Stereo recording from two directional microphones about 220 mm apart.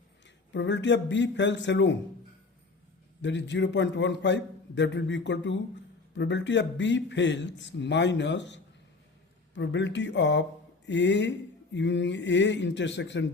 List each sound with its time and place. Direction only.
0.5 s speech: 55° left (ahead or behind)
3.2 s speech: 55° left (ahead or behind)